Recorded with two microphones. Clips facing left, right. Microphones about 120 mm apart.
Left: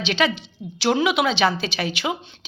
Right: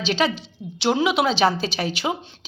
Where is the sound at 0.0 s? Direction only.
35° right (ahead or behind).